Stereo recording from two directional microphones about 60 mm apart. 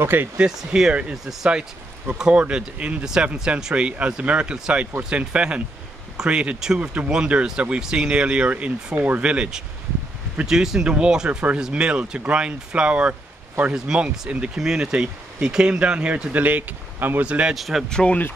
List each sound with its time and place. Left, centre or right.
0.0 s speech: right
0.4 s speech: centre
1.1 s speech: centre
1.5 s speech: centre; by 17.2 s right
17.2 s speech: centre
17.6 s speech: centre
17.8 s speech: centre